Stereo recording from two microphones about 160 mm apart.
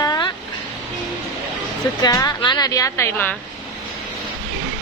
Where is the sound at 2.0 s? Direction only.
25° left (ahead or behind).